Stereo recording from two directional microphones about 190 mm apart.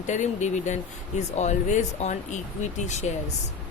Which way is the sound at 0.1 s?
40° left (ahead or behind).